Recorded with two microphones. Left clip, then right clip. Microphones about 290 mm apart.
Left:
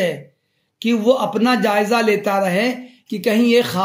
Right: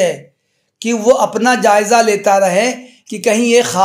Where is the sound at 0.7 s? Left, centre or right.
Centre.